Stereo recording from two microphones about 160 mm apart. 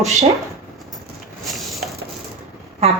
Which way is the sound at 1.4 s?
Centre (ahead or behind).